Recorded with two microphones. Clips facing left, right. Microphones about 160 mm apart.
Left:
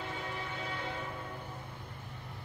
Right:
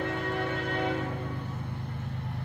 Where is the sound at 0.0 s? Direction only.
65° right (ahead or behind).